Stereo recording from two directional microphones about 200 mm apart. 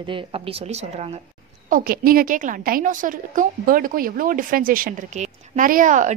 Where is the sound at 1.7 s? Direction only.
45° right (ahead or behind).